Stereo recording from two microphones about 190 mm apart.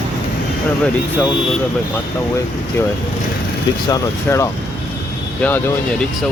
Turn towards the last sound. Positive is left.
turn(degrees=10)  # may be behind; listen again after turning